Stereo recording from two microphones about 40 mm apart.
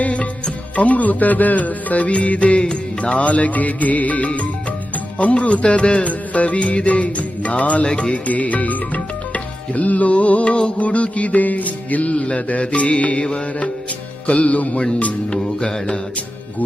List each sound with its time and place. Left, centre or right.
0.0 s music: left
8.3 s music: left
12.1 s music: left
15.3 s music: centre